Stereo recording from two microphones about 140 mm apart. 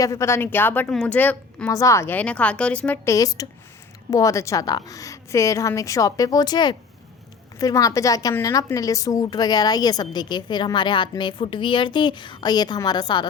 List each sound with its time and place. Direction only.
0.0 s a woman's voice: 20° left (ahead or behind)
1.7 s a woman's voice: 20° left (ahead or behind)